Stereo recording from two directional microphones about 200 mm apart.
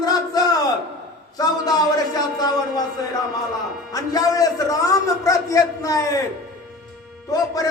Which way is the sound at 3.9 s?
20° left (ahead or behind).